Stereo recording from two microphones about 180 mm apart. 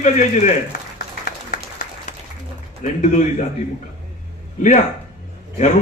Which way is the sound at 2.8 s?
45° left (ahead or behind).